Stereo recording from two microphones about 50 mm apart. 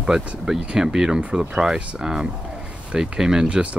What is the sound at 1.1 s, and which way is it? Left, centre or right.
Speech, right.